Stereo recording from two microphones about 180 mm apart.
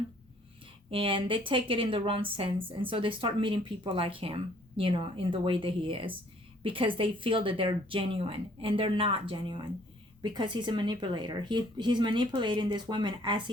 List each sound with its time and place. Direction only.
0.9 s speech: 30° right (ahead or behind)